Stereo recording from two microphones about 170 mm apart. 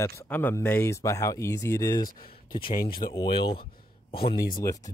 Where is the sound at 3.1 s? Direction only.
30° left (ahead or behind).